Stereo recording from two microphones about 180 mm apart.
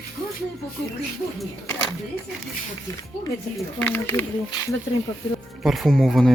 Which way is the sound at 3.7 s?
10° left (ahead or behind).